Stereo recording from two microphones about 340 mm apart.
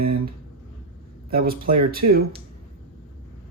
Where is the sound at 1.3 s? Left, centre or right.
Right.